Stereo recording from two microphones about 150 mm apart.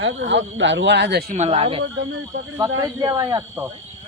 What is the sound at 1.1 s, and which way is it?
Speech, 90° right.